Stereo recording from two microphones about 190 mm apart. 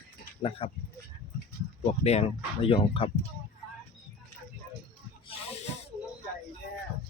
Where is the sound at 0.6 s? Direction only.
30° left (ahead or behind).